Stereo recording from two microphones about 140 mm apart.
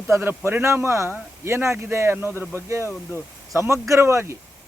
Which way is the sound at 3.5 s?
20° right (ahead or behind).